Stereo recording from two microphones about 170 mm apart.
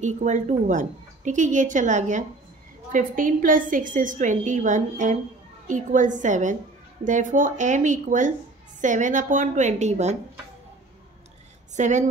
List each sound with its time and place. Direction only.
0.0 s a woman's voice: 45° right (ahead or behind)
11.7 s speech: 45° right (ahead or behind)